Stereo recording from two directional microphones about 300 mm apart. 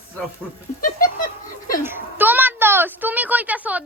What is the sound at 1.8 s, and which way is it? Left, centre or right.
A child's voice, centre.